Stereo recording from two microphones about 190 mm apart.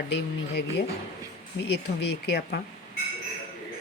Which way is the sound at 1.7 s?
60° left (ahead or behind).